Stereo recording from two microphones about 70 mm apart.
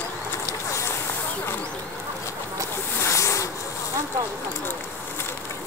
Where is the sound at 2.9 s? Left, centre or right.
Left.